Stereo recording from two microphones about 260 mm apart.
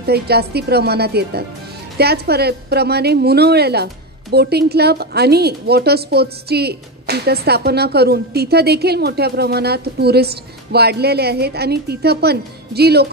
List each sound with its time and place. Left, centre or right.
0.0 s a woman's voice: right